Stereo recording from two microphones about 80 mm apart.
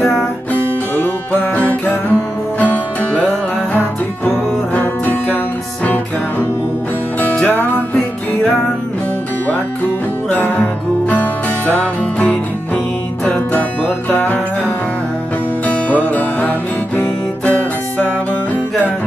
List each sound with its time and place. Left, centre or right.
2.6 s music: centre
4.7 s music: left
7.4 s music: left
10.3 s music: left